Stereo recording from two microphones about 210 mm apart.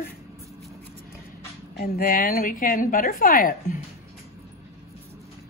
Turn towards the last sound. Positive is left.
turn(degrees=40)  # may be behind; listen again after turning